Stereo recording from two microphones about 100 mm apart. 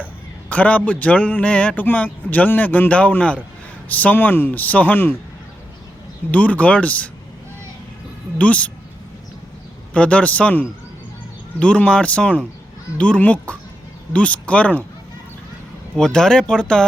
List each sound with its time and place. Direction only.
0.5 s speech: 15° left (ahead or behind)
6.3 s speech: 15° left (ahead or behind)
8.4 s speech: 15° left (ahead or behind)
9.9 s speech: 10° left (ahead or behind)
16.0 s speech: 5° left (ahead or behind)